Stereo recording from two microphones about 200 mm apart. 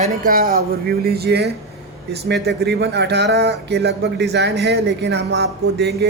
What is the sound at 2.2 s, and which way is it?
Speech, 55° right (ahead or behind).